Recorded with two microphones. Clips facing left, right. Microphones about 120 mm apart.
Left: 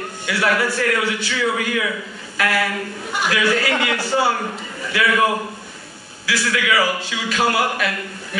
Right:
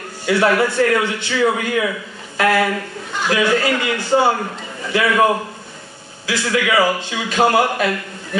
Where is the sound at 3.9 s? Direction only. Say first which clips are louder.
Right 4 dB; 20° right (ahead or behind).